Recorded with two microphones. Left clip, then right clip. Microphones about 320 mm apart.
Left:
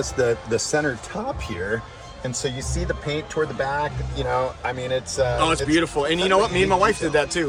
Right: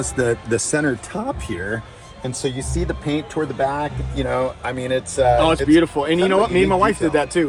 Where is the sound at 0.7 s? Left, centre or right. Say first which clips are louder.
Right 2 dB; right.